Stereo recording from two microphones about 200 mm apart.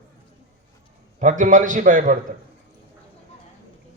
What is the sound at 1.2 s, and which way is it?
A man's voice, 40° right (ahead or behind).